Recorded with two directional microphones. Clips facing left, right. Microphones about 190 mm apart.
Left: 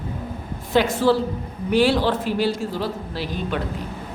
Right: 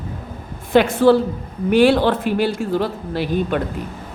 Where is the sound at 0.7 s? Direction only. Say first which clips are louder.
Right 5 dB; 55° right (ahead or behind).